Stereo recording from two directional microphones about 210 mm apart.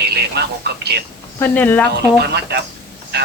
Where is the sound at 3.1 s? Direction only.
50° right (ahead or behind).